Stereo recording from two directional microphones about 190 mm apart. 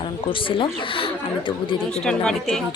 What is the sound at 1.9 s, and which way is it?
Speech, 5° left (ahead or behind).